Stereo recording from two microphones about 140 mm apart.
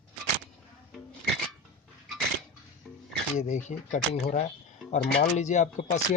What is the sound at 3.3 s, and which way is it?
Speech, 60° left (ahead or behind).